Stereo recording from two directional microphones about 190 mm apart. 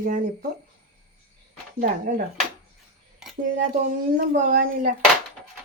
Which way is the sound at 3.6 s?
45° right (ahead or behind).